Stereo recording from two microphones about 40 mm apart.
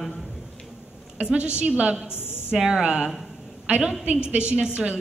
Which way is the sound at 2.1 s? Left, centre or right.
Left.